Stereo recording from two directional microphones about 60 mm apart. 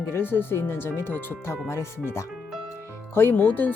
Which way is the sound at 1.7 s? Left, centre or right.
Left.